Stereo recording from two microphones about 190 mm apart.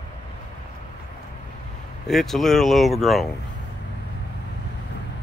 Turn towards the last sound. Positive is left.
turn(degrees=0)  # may be behind; listen again after turning